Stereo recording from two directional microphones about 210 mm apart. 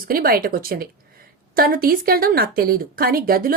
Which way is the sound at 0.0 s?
45° right (ahead or behind).